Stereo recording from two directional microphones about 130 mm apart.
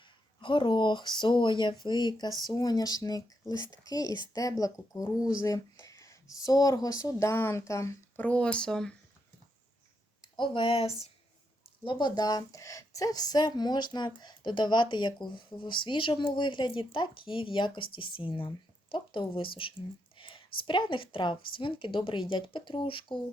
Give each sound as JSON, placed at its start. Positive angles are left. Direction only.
{"t": 0.4, "sound": "speech", "side_deg": 40}
{"t": 10.2, "sound": "speech", "side_deg": 40}
{"t": 11.9, "sound": "a woman's voice", "side_deg": 35}